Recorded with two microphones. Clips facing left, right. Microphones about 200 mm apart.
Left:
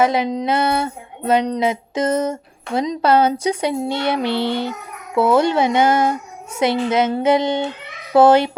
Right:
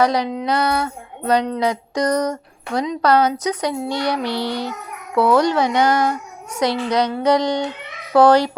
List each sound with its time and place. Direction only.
0.0 s speech: 25° left (ahead or behind)